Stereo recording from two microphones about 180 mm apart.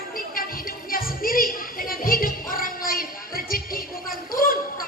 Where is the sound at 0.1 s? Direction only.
50° left (ahead or behind).